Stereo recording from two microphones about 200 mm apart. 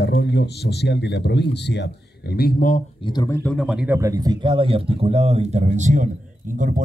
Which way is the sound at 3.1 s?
15° left (ahead or behind).